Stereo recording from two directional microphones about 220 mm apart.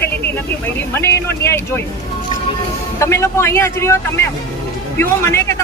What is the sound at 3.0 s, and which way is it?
Speech, 10° left (ahead or behind).